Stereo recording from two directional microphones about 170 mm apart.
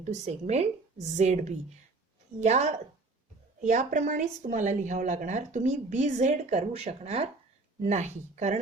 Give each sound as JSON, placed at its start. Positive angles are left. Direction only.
{"t": 0.0, "sound": "a woman's voice", "side_deg": -40}